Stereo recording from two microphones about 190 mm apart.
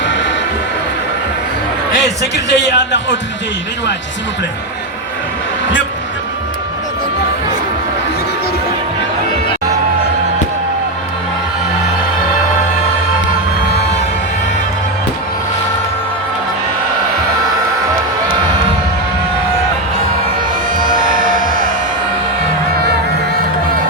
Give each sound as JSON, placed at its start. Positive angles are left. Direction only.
{"t": 0.0, "sound": "music", "side_deg": 70}
{"t": 1.9, "sound": "speech", "side_deg": 65}